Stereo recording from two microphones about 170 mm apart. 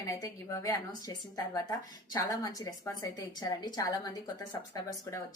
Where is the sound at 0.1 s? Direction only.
20° left (ahead or behind).